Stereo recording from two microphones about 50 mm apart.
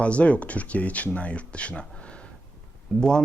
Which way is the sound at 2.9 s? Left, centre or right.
Centre.